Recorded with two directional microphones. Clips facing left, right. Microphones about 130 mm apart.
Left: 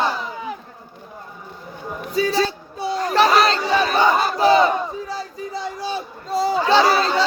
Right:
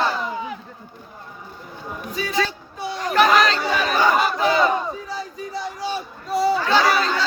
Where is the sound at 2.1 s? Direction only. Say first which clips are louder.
Left 5 dB; 30° left (ahead or behind).